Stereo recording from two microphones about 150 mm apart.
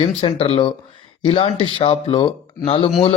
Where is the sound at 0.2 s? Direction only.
35° left (ahead or behind).